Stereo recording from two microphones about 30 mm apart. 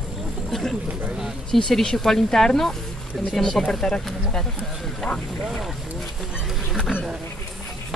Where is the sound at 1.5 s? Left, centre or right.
Centre.